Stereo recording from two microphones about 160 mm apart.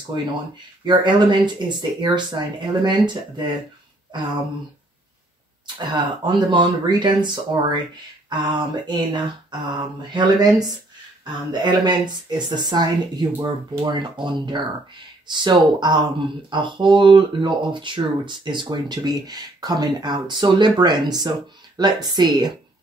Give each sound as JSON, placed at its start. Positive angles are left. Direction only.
{"t": 0.8, "sound": "speech", "side_deg": -30}
{"t": 5.8, "sound": "speech", "side_deg": -25}